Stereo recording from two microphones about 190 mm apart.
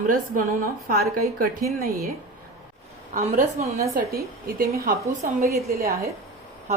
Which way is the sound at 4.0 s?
50° right (ahead or behind).